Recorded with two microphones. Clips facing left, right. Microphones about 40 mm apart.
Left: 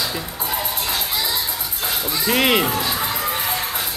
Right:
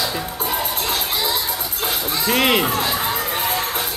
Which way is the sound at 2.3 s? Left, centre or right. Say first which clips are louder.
Even; centre.